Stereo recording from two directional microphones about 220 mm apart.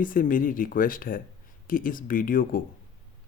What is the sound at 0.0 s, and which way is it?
Speech, 40° left (ahead or behind).